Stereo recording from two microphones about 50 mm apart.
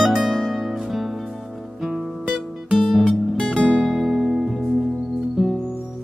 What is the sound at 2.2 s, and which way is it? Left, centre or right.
Music, centre.